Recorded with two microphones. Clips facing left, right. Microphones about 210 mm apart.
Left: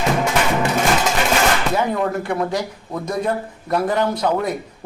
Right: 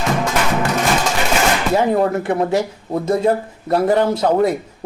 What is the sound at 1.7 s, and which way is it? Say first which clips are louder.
Speech: right 4 dB; 35° right (ahead or behind).